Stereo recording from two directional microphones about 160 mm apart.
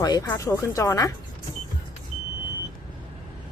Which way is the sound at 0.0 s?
20° left (ahead or behind).